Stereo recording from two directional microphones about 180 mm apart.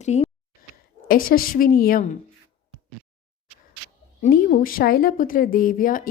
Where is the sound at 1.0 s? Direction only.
55° left (ahead or behind).